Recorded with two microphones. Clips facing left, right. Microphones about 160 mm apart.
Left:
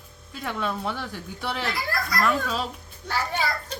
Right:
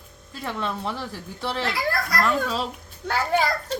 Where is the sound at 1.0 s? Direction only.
30° right (ahead or behind).